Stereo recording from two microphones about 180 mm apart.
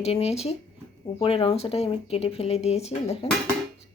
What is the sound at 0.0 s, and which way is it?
Speech, 35° left (ahead or behind).